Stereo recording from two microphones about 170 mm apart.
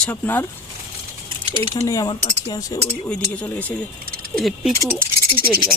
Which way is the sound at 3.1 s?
10° left (ahead or behind).